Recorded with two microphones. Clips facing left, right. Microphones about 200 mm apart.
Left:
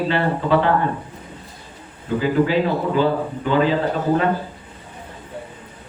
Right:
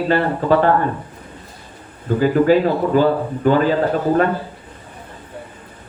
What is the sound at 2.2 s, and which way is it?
Speech, 45° right (ahead or behind).